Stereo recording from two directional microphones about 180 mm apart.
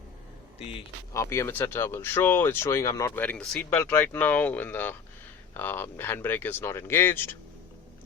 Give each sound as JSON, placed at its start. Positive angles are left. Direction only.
{"t": 0.6, "sound": "speech", "side_deg": 30}
{"t": 1.1, "sound": "speech", "side_deg": 15}